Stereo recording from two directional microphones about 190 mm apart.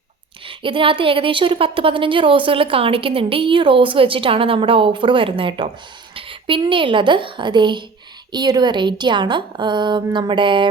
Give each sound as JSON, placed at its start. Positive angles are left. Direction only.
{"t": 0.4, "sound": "speech", "side_deg": -25}